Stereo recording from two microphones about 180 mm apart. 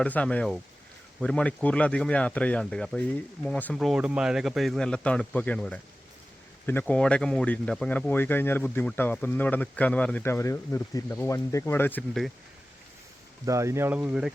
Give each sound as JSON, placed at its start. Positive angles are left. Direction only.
{"t": 0.0, "sound": "speech", "side_deg": 5}
{"t": 13.4, "sound": "speech", "side_deg": -15}